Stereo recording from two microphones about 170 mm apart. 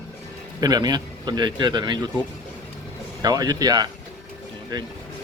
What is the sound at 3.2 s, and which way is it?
Speech, 20° right (ahead or behind).